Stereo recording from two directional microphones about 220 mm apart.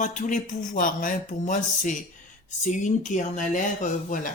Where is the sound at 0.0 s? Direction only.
35° left (ahead or behind).